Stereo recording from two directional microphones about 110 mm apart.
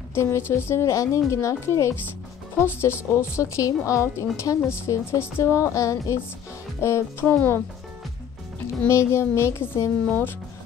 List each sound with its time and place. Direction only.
0.1 s a woman's voice: 25° left (ahead or behind)
8.8 s a woman's voice: 25° left (ahead or behind)